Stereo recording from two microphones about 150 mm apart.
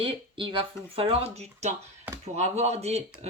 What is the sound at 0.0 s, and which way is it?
Speech, 35° right (ahead or behind).